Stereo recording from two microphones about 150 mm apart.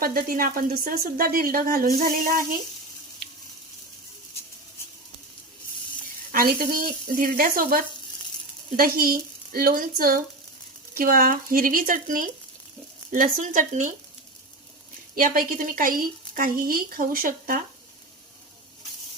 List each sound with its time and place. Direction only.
0.0 s speech: 75° right (ahead or behind)
6.3 s speech: 75° right (ahead or behind); by 13.9 s 60° right (ahead or behind)
15.1 s speech: 70° right (ahead or behind)